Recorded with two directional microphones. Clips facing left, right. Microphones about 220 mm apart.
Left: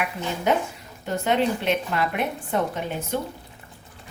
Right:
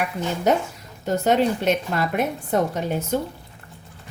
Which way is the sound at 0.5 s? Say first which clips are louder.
Right 2 dB; 40° right (ahead or behind).